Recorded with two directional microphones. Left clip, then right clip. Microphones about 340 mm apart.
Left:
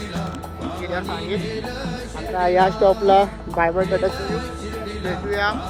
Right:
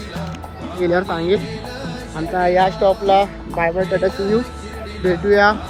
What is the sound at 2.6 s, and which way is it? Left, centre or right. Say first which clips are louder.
Speech: right 1 dB; left.